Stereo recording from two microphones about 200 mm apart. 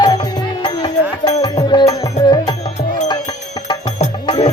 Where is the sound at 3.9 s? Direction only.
35° left (ahead or behind).